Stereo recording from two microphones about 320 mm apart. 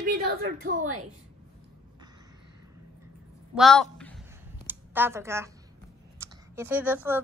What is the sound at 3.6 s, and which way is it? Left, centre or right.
Speech, centre.